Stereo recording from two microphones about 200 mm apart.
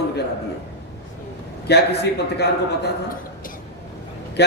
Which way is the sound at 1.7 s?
55° left (ahead or behind).